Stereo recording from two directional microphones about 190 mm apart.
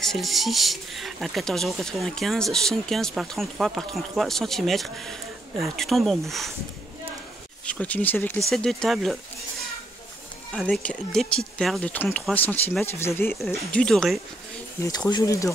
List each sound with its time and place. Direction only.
0.0 s speech: centre (ahead or behind)
7.6 s speech: 5° left (ahead or behind)
10.5 s speech: 5° left (ahead or behind)
14.8 s speech: 20° left (ahead or behind)